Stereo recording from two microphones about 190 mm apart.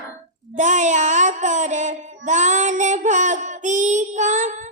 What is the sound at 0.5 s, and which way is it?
Child singing, 40° right (ahead or behind).